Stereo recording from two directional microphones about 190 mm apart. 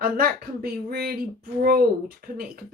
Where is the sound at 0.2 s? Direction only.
55° right (ahead or behind).